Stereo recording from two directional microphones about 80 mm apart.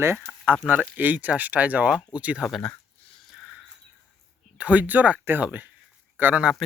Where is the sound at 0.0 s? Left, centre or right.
Right.